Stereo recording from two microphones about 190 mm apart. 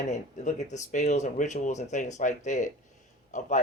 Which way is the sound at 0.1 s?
40° left (ahead or behind).